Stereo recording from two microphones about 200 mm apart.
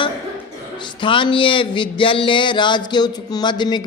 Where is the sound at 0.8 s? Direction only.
25° left (ahead or behind).